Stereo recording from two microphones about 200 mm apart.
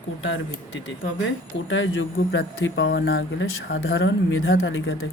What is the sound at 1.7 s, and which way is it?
Speech, 70° left (ahead or behind).